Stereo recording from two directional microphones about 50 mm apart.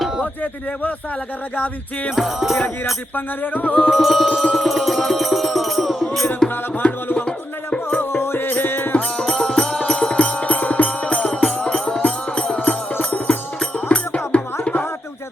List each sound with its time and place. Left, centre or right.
2.1 s music: centre
3.2 s music: left
3.8 s music: centre
6.8 s music: left
8.1 s music: left
9.1 s music: centre; by 14.8 s left